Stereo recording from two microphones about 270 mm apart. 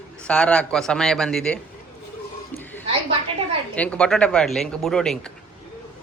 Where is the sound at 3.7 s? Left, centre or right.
Centre.